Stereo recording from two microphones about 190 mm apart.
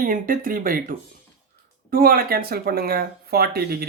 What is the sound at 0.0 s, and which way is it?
Speech, 45° right (ahead or behind).